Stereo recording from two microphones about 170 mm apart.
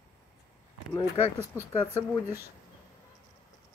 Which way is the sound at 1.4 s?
20° left (ahead or behind).